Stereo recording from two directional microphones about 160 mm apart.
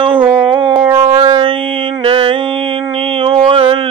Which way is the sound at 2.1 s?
35° right (ahead or behind).